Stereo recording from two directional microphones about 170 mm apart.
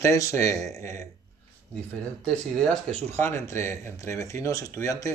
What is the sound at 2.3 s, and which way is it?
Speech, 5° left (ahead or behind).